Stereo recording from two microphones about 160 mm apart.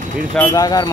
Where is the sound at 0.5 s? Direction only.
20° left (ahead or behind).